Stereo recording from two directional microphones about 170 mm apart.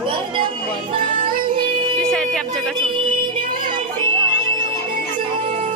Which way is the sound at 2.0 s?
5° left (ahead or behind).